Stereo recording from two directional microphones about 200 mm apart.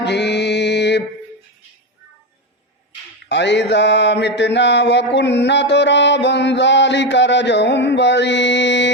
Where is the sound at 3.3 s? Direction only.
60° left (ahead or behind).